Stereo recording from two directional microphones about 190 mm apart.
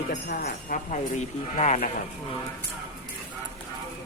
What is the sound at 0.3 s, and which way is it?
Speech, 50° left (ahead or behind).